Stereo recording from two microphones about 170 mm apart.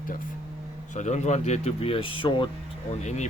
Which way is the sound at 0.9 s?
45° left (ahead or behind).